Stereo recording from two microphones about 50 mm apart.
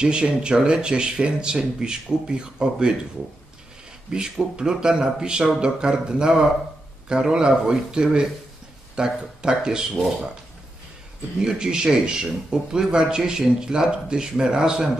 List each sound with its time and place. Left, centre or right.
0.0 s a man's voice: centre
4.1 s a man's voice: centre
11.3 s a man's voice: centre